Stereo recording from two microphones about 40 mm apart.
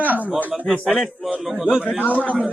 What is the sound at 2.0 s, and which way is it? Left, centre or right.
Speech, left.